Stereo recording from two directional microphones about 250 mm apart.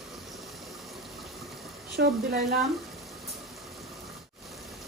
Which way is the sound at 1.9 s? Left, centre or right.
Right.